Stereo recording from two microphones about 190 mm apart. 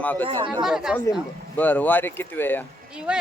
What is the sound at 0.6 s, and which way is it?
Speech, 5° right (ahead or behind).